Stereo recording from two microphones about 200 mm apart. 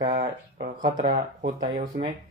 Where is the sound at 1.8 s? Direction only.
35° right (ahead or behind).